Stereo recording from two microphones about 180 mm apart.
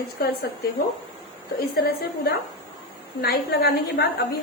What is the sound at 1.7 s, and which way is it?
A woman's voice, 60° left (ahead or behind).